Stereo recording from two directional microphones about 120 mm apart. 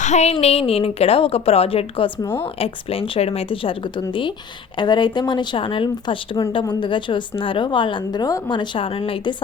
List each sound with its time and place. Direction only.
0.0 s a woman's voice: 70° left (ahead or behind); by 9.3 s 50° left (ahead or behind)